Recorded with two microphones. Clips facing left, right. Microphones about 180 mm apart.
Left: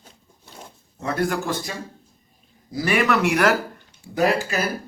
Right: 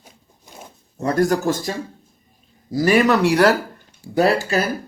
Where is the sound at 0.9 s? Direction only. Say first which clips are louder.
Right 6 dB; 45° right (ahead or behind).